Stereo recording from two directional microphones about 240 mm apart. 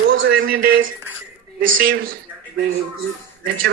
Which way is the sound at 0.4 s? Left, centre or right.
Right.